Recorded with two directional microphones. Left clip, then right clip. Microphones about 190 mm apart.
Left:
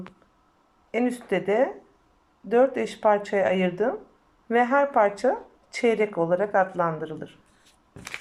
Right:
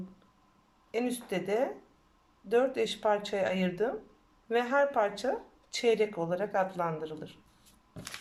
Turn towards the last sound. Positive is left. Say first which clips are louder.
# left 7 dB
turn(degrees=5)  # may be behind; listen again after turning